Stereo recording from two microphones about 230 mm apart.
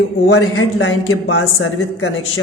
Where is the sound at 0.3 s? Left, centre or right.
Left.